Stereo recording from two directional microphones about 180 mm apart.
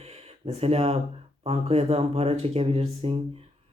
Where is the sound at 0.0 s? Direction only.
35° right (ahead or behind).